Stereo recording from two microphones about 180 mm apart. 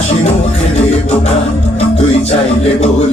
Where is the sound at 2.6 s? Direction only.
35° left (ahead or behind).